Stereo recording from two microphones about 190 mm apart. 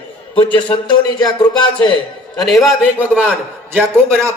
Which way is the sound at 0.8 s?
20° left (ahead or behind).